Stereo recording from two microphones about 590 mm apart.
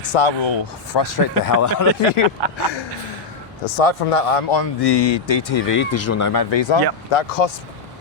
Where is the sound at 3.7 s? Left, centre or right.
Left.